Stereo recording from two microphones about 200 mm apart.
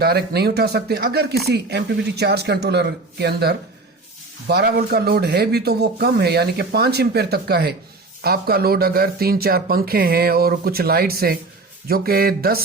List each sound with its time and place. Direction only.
0.0 s a man's voice: 55° right (ahead or behind)